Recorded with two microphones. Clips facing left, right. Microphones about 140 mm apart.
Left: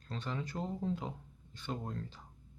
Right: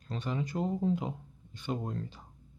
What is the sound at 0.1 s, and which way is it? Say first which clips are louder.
Speech: right 5 dB; 15° right (ahead or behind).